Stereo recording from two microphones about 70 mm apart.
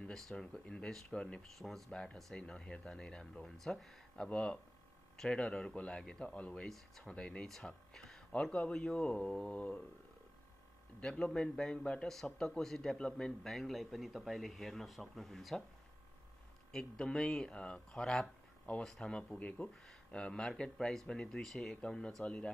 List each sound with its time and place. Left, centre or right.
0.1 s speech: centre
11.0 s a man's voice: centre
16.7 s speech: centre